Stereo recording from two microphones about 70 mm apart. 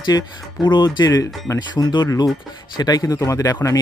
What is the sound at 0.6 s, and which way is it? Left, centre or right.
Speech, left.